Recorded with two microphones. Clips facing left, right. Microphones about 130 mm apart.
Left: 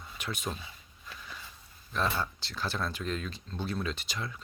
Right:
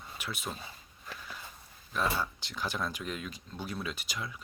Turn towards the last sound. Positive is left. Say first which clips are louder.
# left 2 dB
turn(degrees=-10)  # may be behind; listen again after turning